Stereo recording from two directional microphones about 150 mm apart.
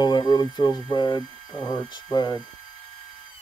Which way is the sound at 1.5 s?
30° left (ahead or behind).